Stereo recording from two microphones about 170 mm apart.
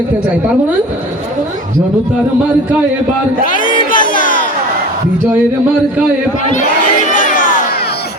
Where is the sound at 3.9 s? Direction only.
50° left (ahead or behind).